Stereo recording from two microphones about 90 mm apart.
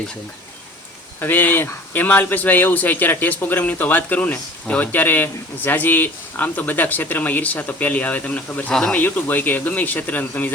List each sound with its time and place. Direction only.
1.2 s speech: 20° left (ahead or behind)
8.7 s speech: 10° left (ahead or behind)
9.0 s speech: 20° left (ahead or behind)